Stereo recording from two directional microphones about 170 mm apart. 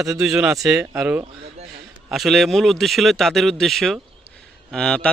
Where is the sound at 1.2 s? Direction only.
40° right (ahead or behind).